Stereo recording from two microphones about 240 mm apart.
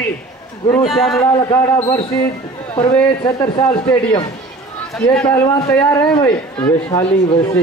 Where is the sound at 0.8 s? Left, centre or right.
Centre.